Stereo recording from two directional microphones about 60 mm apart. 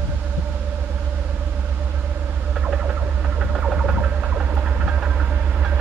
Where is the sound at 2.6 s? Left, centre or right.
Centre.